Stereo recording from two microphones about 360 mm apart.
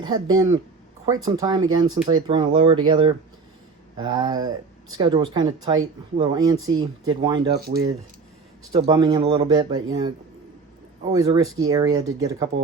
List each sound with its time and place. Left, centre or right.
0.0 s speech: centre
6.7 s speech: right
7.1 s speech: centre
8.7 s speech: centre
11.1 s speech: centre